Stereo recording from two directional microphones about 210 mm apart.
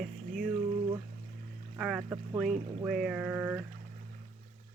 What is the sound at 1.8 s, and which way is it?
Speech, 5° right (ahead or behind).